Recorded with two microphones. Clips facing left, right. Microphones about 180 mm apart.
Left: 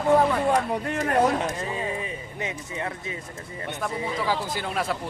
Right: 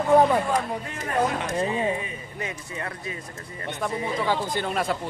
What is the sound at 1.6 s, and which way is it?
Speech, 25° right (ahead or behind).